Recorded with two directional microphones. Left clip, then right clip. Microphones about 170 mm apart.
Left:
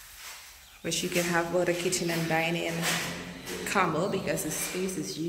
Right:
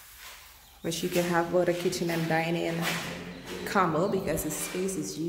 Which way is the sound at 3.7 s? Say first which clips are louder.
Right 1 dB; 20° right (ahead or behind).